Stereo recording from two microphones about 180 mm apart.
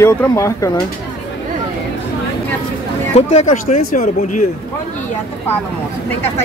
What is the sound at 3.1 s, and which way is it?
Speech, 40° left (ahead or behind).